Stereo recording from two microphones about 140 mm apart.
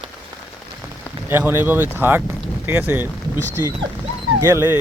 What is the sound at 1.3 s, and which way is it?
Speech, 15° right (ahead or behind).